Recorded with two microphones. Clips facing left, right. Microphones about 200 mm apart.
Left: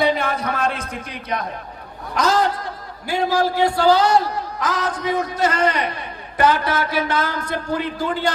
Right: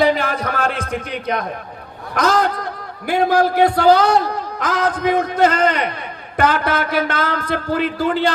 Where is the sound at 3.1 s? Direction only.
55° right (ahead or behind).